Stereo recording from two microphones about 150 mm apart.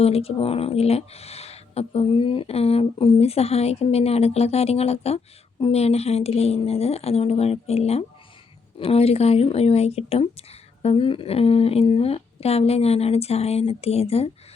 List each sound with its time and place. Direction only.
0.0 s speech: 40° left (ahead or behind)